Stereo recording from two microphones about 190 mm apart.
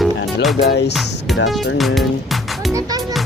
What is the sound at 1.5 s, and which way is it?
Speech, centre (ahead or behind).